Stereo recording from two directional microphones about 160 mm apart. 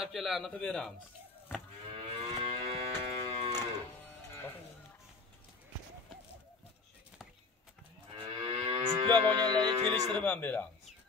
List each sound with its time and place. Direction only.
0.0 s a man's voice: centre (ahead or behind)
1.9 s moo: 30° right (ahead or behind)
3.5 s music: 15° left (ahead or behind)
8.2 s livestock: 35° right (ahead or behind)
10.1 s speech: 10° left (ahead or behind)